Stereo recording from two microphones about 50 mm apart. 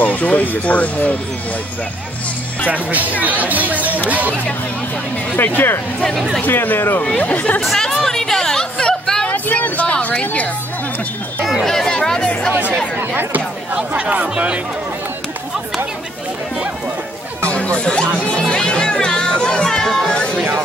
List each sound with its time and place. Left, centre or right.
0.0 s speech: left
2.7 s speech: right
5.3 s speech: left
7.2 s speech: left
7.6 s a sound: centre
9.3 s a sound: left
11.6 s chatter: centre
13.1 s speech: right
13.9 s speech: right
17.4 s music: left; by 20.1 s centre
20.1 s music: left